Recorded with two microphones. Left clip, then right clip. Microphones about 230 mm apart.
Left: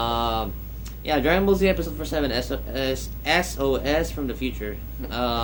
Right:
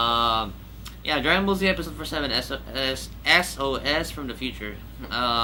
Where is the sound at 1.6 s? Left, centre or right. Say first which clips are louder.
Left 2 dB; centre.